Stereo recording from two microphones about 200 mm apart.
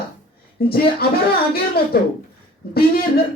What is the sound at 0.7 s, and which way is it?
Speech, 50° left (ahead or behind).